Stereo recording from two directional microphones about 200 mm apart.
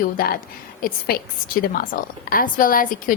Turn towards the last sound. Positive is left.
turn(degrees=45)  # may be behind; listen again after turning